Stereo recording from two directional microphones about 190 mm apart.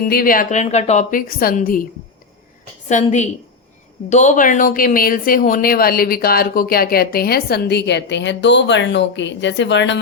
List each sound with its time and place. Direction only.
0.0 s speech: 50° left (ahead or behind)
2.9 s a woman's voice: 40° left (ahead or behind); by 10.0 s 70° left (ahead or behind)